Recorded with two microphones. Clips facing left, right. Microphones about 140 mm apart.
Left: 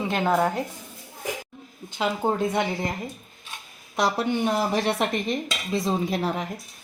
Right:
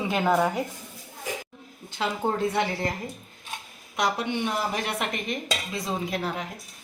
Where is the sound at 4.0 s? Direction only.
35° left (ahead or behind).